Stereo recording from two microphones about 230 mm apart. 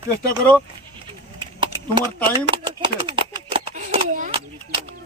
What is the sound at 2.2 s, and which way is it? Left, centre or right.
Speech, right.